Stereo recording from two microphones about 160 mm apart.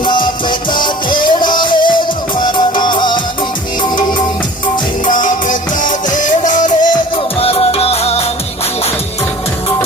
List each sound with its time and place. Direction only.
0.0 s music: 30° left (ahead or behind)
5.0 s music: 55° left (ahead or behind)
7.4 s music: 35° left (ahead or behind)